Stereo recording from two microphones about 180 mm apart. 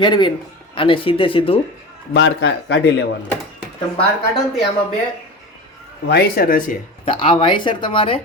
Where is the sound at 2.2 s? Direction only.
85° left.